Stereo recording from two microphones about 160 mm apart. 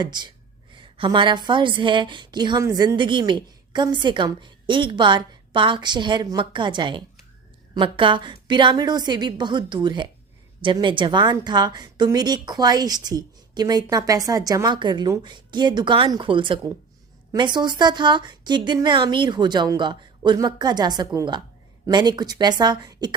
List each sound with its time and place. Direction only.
0.0 s a woman's voice: 25° right (ahead or behind)